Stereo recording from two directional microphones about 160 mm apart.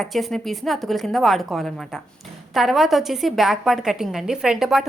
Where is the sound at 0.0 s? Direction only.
Centre (ahead or behind).